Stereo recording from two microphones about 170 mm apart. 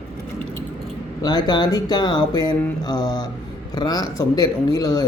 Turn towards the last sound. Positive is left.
turn(degrees=20)  # may be behind; listen again after turning